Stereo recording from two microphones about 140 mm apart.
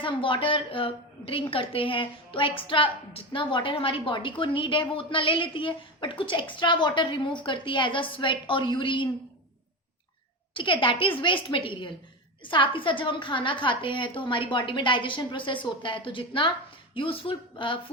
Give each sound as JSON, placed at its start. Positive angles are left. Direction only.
{"t": 0.0, "sound": "a woman's voice", "side_deg": 40}
{"t": 10.5, "sound": "a woman's voice", "side_deg": 35}